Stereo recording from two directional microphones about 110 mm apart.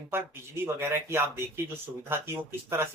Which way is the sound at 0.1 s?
20° right (ahead or behind).